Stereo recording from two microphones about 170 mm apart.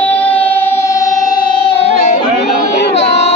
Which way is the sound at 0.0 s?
10° left (ahead or behind).